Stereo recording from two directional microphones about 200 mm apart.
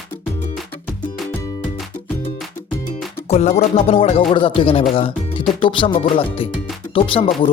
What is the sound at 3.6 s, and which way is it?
Speech, 30° left (ahead or behind).